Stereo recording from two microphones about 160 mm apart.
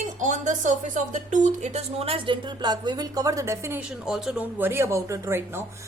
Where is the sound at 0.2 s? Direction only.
50° right (ahead or behind).